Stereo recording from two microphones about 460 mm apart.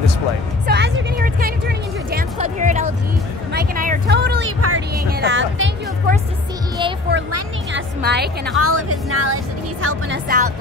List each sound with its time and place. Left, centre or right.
0.7 s music: right
8.5 s speech: right